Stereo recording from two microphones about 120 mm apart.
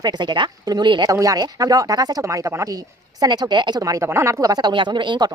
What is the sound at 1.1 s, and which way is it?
Speech, 30° right (ahead or behind).